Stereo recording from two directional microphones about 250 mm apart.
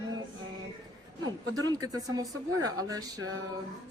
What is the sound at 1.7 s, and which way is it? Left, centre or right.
Speech, centre.